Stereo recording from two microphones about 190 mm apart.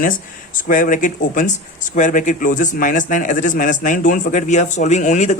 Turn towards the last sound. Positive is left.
turn(degrees=40)  # may be behind; listen again after turning